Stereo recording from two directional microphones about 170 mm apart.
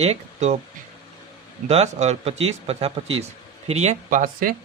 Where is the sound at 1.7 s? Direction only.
40° right (ahead or behind).